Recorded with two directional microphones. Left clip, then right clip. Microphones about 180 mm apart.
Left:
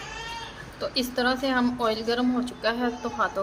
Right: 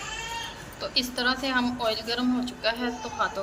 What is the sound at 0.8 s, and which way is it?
A man's voice, 65° left (ahead or behind).